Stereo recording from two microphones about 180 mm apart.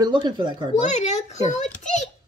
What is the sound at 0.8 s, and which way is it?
A child's voice, 40° left (ahead or behind).